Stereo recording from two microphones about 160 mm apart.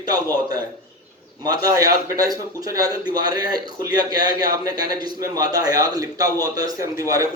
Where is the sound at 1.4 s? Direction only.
25° right (ahead or behind).